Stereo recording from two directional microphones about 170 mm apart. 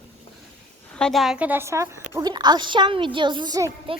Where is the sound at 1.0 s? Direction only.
Centre (ahead or behind).